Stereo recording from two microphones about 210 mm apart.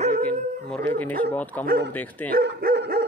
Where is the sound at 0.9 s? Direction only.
5° left (ahead or behind).